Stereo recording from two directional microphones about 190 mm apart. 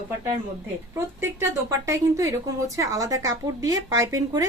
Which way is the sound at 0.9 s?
15° right (ahead or behind).